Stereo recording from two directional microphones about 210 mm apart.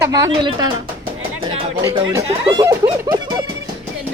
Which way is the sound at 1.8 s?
15° right (ahead or behind).